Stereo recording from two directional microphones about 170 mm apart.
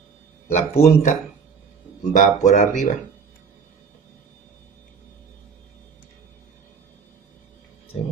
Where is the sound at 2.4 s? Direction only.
45° left (ahead or behind).